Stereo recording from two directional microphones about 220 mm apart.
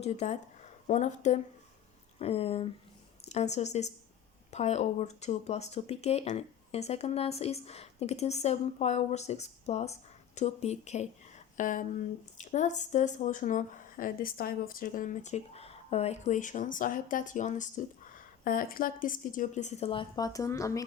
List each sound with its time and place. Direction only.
0.0 s speech: 30° left (ahead or behind); by 20.8 s 15° left (ahead or behind)